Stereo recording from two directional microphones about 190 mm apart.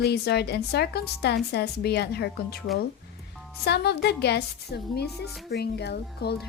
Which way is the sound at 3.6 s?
60° left (ahead or behind).